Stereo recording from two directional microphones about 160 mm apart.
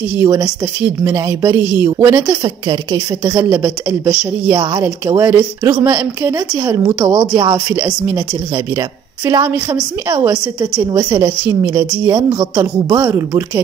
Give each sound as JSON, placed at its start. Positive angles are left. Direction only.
{"t": 0.2, "sound": "a woman's voice", "side_deg": -25}
{"t": 2.2, "sound": "a woman's voice", "side_deg": -25}
{"t": 3.3, "sound": "a woman's voice", "side_deg": -15}
{"t": 4.1, "sound": "a woman's voice", "side_deg": -5}
{"t": 4.8, "sound": "a woman's voice", "side_deg": -15}
{"t": 7.1, "sound": "a woman's voice", "side_deg": -30}
{"t": 7.7, "sound": "a woman's voice", "side_deg": -10}
{"t": 9.2, "sound": "a woman's voice", "side_deg": -20}